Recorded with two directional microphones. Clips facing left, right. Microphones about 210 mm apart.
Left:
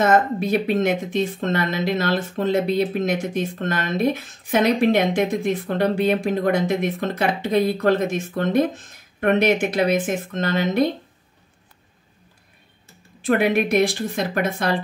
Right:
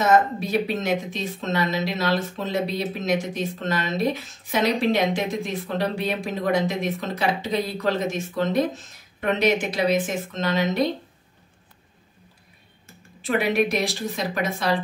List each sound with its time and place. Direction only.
0.0 s speech: 55° left (ahead or behind)
13.2 s speech: 55° left (ahead or behind)